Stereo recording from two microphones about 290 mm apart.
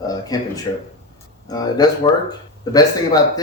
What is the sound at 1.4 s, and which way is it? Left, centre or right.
A man's voice, centre.